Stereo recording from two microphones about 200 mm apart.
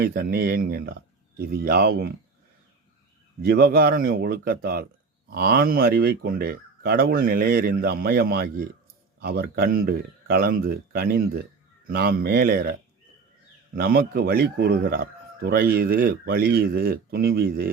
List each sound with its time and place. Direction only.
0.0 s speech: 50° right (ahead or behind)
3.4 s speech: 50° right (ahead or behind)
13.7 s speech: 50° right (ahead or behind)